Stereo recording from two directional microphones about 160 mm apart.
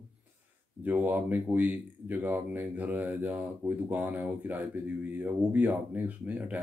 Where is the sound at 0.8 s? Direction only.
10° right (ahead or behind).